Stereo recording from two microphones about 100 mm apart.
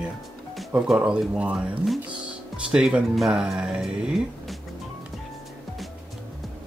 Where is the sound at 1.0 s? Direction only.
10° right (ahead or behind).